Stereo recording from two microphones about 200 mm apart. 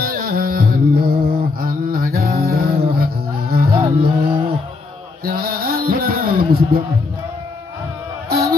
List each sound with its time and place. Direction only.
0.0 s music: 45° right (ahead or behind)
3.7 s music: 25° right (ahead or behind)
5.2 s music: 50° right (ahead or behind)
8.3 s music: 50° right (ahead or behind)